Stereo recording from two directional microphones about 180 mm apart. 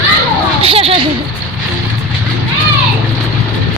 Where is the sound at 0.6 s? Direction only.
30° right (ahead or behind).